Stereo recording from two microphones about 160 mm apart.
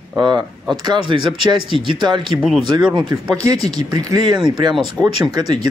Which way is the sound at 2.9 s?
30° right (ahead or behind).